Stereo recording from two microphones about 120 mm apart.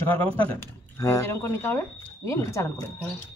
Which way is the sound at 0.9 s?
25° left (ahead or behind).